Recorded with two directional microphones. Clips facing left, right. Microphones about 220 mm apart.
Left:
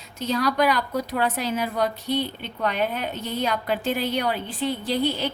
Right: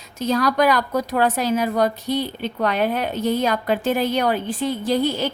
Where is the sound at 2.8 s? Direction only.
80° right.